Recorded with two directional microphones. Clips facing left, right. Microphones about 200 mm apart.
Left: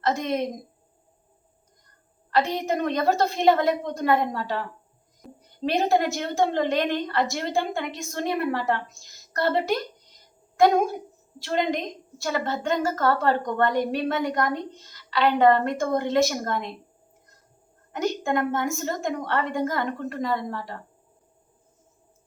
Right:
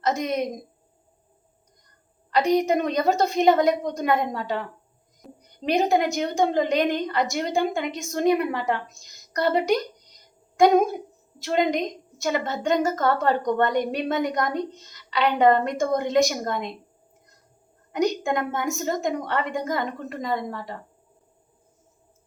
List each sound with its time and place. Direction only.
0.0 s a woman's voice: 20° right (ahead or behind)
2.3 s a woman's voice: 15° right (ahead or behind)
5.2 s a sound: centre (ahead or behind)
5.6 s a woman's voice: 15° right (ahead or behind)
11.4 s a woman's voice: 20° right (ahead or behind)
17.9 s a woman's voice: 15° right (ahead or behind)